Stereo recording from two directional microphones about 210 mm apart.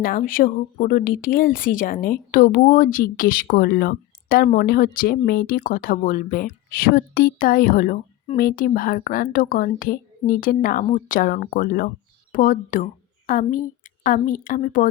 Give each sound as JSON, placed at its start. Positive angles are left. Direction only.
{"t": 0.0, "sound": "a woman's voice", "side_deg": 40}